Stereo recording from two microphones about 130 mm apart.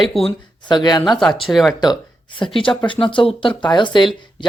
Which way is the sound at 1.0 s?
Centre (ahead or behind).